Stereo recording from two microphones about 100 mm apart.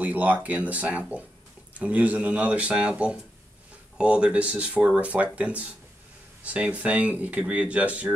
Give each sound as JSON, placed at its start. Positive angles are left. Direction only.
{"t": 0.0, "sound": "speech", "side_deg": -15}